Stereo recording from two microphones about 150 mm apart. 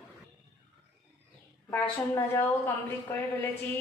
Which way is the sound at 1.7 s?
15° left (ahead or behind).